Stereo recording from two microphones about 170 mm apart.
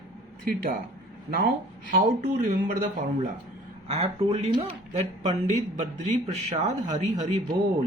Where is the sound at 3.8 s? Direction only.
35° right (ahead or behind).